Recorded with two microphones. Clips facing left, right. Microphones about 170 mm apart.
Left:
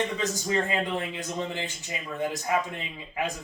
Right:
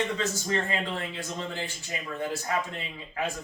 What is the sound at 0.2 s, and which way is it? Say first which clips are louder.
A man's voice: left 2 dB; 15° left (ahead or behind).